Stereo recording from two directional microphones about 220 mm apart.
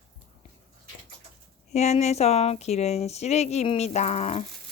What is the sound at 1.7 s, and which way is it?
Speech, 30° left (ahead or behind).